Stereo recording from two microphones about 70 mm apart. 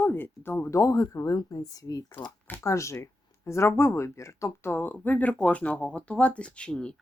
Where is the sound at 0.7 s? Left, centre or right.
Left.